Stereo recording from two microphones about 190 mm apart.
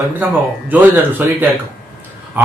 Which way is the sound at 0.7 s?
10° right (ahead or behind).